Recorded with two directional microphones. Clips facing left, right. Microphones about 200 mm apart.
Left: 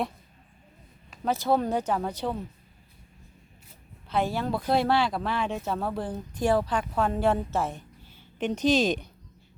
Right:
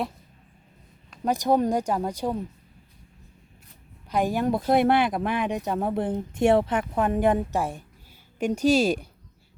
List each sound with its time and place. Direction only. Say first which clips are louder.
1.2 s speech: right 3 dB; 15° right (ahead or behind)
4.1 s speech: right 4 dB; 15° right (ahead or behind)